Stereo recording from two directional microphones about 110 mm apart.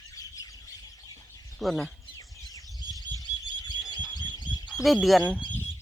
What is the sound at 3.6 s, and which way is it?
Bird, 40° left (ahead or behind).